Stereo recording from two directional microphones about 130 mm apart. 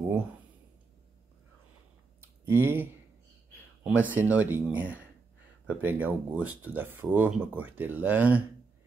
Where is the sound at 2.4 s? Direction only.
15° right (ahead or behind).